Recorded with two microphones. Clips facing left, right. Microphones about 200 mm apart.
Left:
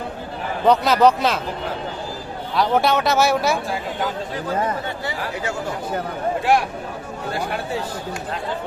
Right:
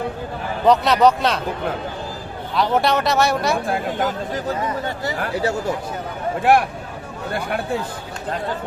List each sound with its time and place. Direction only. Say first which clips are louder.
0.6 s speech: even; centre (ahead or behind)
2.6 s speech: even; centre (ahead or behind)
3.7 s speech: right 3 dB; 45° right (ahead or behind)
6.4 s speech: right 5 dB; 55° right (ahead or behind)